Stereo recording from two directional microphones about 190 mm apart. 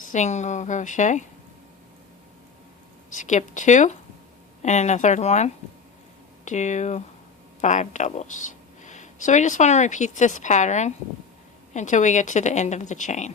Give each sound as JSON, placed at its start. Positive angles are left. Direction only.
{"t": 0.1, "sound": "a woman's voice", "side_deg": 40}
{"t": 3.1, "sound": "a woman's voice", "side_deg": 40}